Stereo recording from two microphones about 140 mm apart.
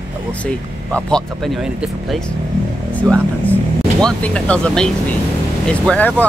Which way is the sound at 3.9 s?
5° left (ahead or behind).